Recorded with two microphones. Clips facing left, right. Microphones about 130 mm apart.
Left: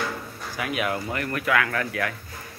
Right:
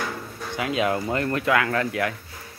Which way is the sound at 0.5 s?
25° right (ahead or behind).